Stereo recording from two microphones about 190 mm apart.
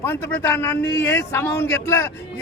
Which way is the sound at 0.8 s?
75° left (ahead or behind).